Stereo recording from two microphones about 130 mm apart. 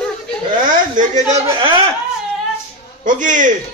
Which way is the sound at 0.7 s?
80° right.